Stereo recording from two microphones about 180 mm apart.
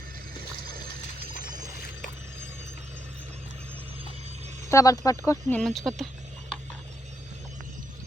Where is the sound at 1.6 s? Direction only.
50° left (ahead or behind).